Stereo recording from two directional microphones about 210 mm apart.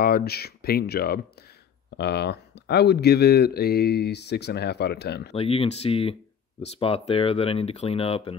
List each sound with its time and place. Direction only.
0.0 s speech: 45° left (ahead or behind)
5.3 s speech: 30° left (ahead or behind)